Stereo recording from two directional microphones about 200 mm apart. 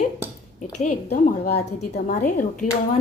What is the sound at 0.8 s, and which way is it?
A woman's voice, 35° left (ahead or behind).